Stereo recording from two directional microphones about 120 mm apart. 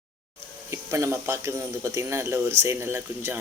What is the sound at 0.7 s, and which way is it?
Speech, 25° right (ahead or behind).